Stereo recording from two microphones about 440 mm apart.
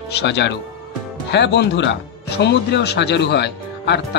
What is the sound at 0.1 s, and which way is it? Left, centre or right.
Speech, left.